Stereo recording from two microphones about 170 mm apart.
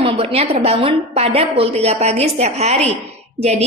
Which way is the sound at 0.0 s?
35° right (ahead or behind).